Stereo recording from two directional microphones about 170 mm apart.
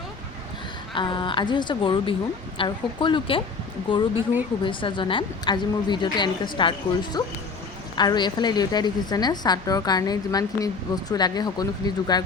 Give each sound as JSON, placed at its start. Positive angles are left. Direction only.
{"t": 0.9, "sound": "a woman's voice", "side_deg": 30}